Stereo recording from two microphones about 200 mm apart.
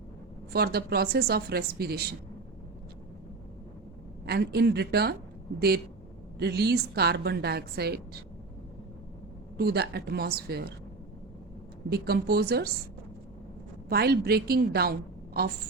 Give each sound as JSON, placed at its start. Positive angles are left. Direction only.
{"t": 0.5, "sound": "a woman's voice", "side_deg": -50}
{"t": 4.3, "sound": "a woman's voice", "side_deg": -55}
{"t": 9.6, "sound": "a woman's voice", "side_deg": -50}
{"t": 11.9, "sound": "a woman's voice", "side_deg": -50}
{"t": 13.9, "sound": "a woman's voice", "side_deg": -50}